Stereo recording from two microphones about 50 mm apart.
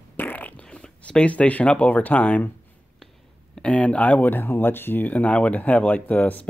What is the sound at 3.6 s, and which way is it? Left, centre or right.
Speech, left.